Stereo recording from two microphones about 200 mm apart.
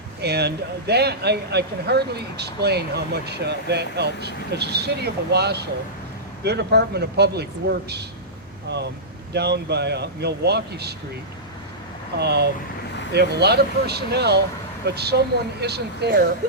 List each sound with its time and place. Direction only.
0.2 s speech: 55° right (ahead or behind)
9.3 s speech: 55° right (ahead or behind)
12.2 s speech: 55° right (ahead or behind)